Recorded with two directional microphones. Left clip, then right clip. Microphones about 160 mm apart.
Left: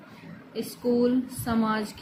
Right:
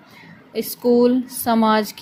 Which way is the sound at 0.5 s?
50° right (ahead or behind).